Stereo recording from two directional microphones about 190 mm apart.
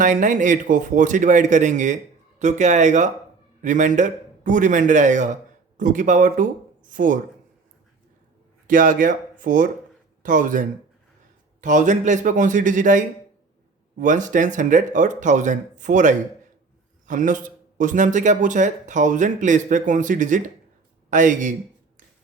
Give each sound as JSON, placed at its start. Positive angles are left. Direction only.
{"t": 0.0, "sound": "a man's voice", "side_deg": -40}
{"t": 8.6, "sound": "a man's voice", "side_deg": -45}